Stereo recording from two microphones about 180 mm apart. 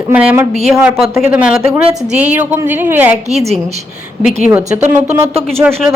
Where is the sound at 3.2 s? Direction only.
35° right (ahead or behind).